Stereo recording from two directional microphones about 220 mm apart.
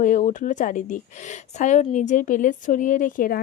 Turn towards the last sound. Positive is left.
turn(degrees=40)  # may be behind; listen again after turning